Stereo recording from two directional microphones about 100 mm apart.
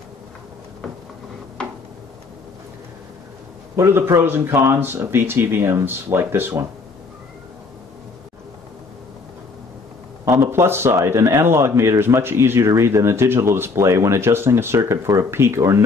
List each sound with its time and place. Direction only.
1.6 s a sound: 10° left (ahead or behind)
3.7 s speech: 25° right (ahead or behind)
10.2 s speech: 25° right (ahead or behind)